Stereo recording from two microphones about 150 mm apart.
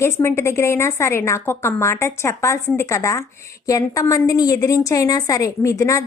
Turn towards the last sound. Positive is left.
turn(degrees=20)  # may be behind; listen again after turning